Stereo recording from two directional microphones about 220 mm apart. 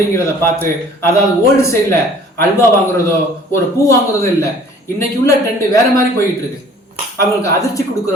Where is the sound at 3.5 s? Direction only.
15° left (ahead or behind).